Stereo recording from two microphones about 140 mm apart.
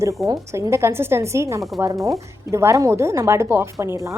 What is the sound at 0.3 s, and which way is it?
A woman's voice, 25° right (ahead or behind).